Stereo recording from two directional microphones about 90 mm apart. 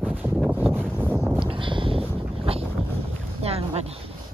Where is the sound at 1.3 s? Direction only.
70° right (ahead or behind); by 2.6 s 90° right.